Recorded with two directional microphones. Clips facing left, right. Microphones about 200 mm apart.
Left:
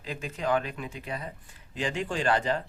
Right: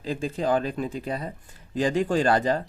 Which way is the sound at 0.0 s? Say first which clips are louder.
Right 6 dB; 30° right (ahead or behind).